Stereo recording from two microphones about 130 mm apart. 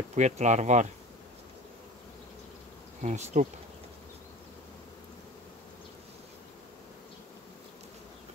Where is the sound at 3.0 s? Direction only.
65° right (ahead or behind).